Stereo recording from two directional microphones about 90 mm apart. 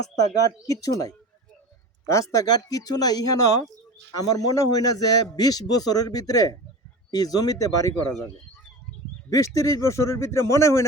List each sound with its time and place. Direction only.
0.2 s a man's voice: 40° left (ahead or behind)
9.6 s speech: 35° left (ahead or behind)